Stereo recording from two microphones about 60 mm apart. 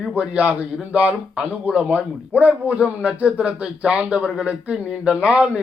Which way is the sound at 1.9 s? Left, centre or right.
Right.